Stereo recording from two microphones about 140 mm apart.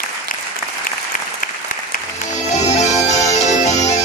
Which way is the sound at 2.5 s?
55° left (ahead or behind).